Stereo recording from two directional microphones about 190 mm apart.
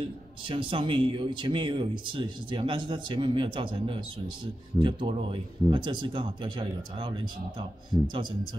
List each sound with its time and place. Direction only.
0.5 s speech: 30° right (ahead or behind)